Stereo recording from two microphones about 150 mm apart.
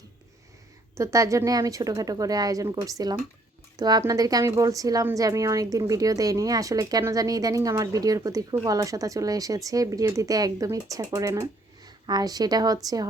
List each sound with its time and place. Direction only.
0.9 s a woman's voice: 20° right (ahead or behind)